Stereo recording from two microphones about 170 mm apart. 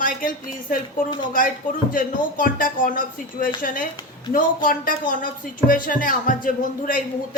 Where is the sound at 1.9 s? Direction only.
55° left (ahead or behind).